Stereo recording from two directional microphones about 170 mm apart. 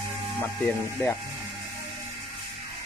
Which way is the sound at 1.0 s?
10° left (ahead or behind).